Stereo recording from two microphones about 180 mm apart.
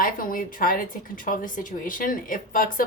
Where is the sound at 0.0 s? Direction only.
50° left (ahead or behind).